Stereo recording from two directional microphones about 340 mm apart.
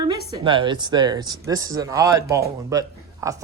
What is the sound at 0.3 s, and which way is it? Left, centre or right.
A man's voice, centre.